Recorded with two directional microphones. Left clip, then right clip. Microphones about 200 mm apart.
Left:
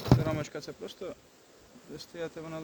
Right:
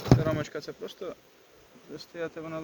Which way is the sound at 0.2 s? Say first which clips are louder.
Right 3 dB; 25° left (ahead or behind).